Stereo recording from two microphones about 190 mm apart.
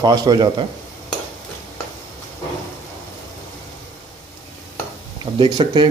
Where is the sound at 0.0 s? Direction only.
20° right (ahead or behind).